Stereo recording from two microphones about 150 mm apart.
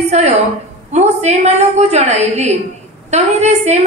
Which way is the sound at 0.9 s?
45° right (ahead or behind).